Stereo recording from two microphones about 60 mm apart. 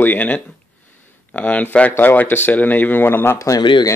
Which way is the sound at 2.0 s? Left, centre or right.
Left.